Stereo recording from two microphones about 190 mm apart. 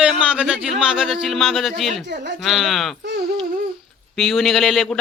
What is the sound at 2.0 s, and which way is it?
Speech, 65° right (ahead or behind).